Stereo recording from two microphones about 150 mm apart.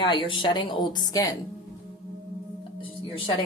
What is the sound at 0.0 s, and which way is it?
Speech, 35° left (ahead or behind).